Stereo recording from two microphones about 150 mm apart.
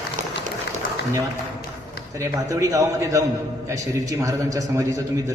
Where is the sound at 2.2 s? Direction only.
20° right (ahead or behind).